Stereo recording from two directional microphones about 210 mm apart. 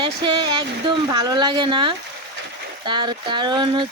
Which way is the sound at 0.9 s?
20° right (ahead or behind).